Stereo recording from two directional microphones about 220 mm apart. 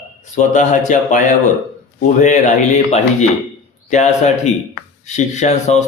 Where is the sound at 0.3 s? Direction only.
35° left (ahead or behind).